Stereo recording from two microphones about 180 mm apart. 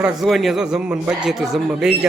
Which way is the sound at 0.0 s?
Centre (ahead or behind).